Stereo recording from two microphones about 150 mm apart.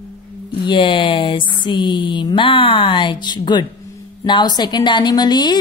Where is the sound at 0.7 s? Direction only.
35° left (ahead or behind).